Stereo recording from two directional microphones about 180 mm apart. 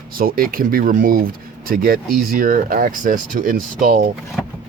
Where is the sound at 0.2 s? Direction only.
55° right (ahead or behind).